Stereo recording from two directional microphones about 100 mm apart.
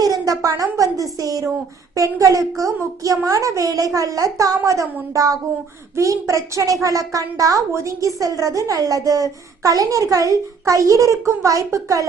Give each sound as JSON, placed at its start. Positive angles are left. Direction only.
{"t": 0.0, "sound": "a woman's voice", "side_deg": -35}